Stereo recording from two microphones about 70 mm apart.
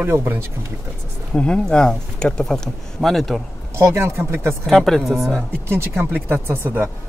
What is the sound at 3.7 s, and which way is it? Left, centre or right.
Speech, right.